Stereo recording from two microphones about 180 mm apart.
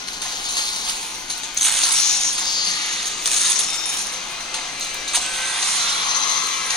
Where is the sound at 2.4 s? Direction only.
20° left (ahead or behind).